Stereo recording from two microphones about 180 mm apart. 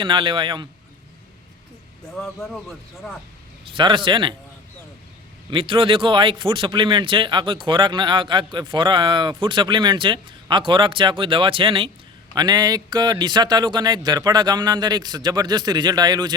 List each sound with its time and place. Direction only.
0.0 s a man's voice: 25° right (ahead or behind)
2.1 s speech: centre (ahead or behind)
3.7 s a man's voice: 25° right (ahead or behind)
5.5 s a man's voice: 30° right (ahead or behind)